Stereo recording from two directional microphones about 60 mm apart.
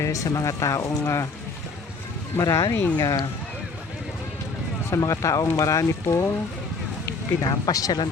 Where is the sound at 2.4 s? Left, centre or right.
Left.